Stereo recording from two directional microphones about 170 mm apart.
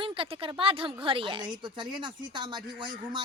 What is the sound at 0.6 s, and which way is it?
A woman's voice, 35° right (ahead or behind).